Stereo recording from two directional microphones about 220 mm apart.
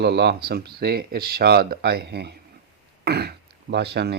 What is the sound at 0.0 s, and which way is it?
Speech, 50° right (ahead or behind).